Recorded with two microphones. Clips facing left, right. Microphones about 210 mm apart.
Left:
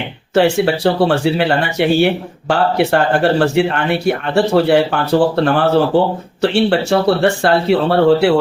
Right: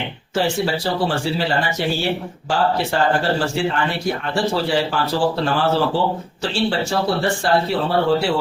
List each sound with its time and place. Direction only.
0.3 s speech: 70° left (ahead or behind)